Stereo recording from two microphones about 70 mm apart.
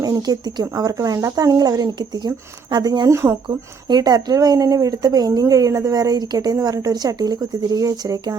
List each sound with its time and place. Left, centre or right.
0.0 s speech: right
0.6 s speech: right
3.1 s speech: right
3.5 s speech: right